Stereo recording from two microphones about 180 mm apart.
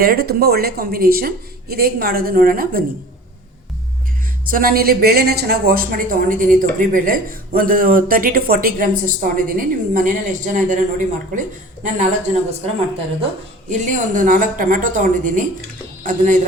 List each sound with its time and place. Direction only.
0.0 s speech: 60° right (ahead or behind)
4.4 s a woman's voice: 55° right (ahead or behind)
13.7 s a woman's voice: 40° right (ahead or behind)